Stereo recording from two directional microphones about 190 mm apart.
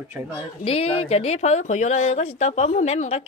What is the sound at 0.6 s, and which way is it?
Speech, 30° left (ahead or behind).